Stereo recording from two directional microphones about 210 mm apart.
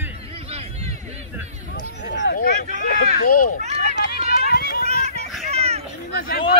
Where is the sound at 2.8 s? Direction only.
40° left (ahead or behind).